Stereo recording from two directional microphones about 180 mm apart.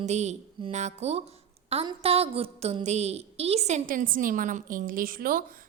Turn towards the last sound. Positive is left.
turn(degrees=-50)  # may be behind; listen again after turning